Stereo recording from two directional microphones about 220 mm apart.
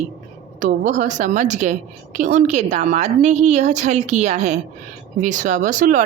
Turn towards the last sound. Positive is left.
turn(degrees=-35)  # may be behind; listen again after turning